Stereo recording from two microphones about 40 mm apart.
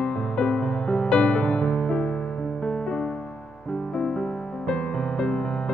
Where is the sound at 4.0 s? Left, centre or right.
Centre.